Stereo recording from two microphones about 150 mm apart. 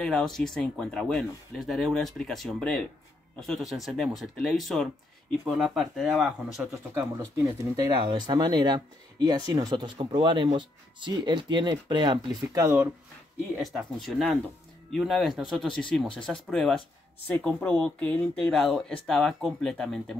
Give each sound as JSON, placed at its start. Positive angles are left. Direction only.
{"t": 0.0, "sound": "speech", "side_deg": 5}
{"t": 6.9, "sound": "speech", "side_deg": -20}
{"t": 13.7, "sound": "speech", "side_deg": 0}